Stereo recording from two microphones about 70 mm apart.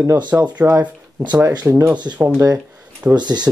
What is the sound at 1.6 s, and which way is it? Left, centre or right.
Speech, right.